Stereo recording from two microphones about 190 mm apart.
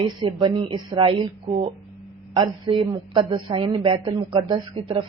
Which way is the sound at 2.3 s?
25° right (ahead or behind).